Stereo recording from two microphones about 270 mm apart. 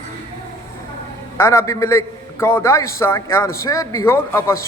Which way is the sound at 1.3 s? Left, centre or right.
Centre.